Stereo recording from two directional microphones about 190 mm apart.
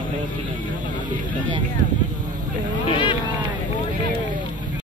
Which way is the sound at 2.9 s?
25° left (ahead or behind).